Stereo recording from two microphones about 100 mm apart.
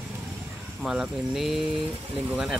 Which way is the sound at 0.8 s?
5° right (ahead or behind).